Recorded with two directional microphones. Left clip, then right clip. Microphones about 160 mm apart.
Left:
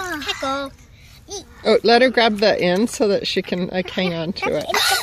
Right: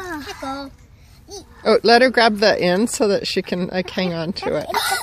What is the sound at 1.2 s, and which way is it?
Speech, 10° right (ahead or behind).